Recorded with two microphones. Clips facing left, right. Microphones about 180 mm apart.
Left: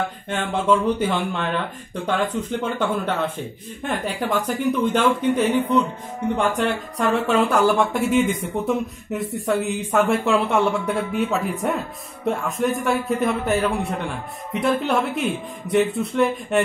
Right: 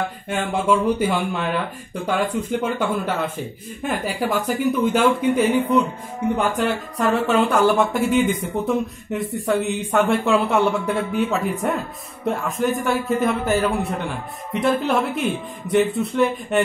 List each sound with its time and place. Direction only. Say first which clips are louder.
0.3 s speech: even; 10° right (ahead or behind)